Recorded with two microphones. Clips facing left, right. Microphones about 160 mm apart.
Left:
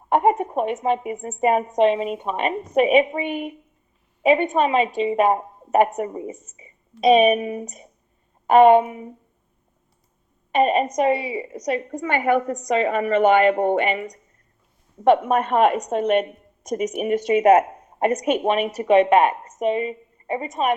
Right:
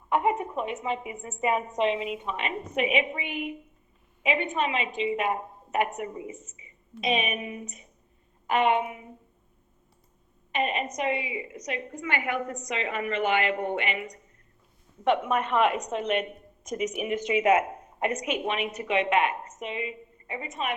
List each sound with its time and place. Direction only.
0.1 s a woman's voice: 40° left (ahead or behind)
10.5 s a woman's voice: 40° left (ahead or behind)